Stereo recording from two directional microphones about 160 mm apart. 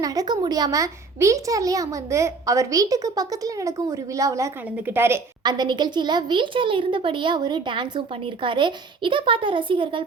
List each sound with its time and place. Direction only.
0.0 s a child's voice: 20° right (ahead or behind)
5.4 s speech: 25° right (ahead or behind)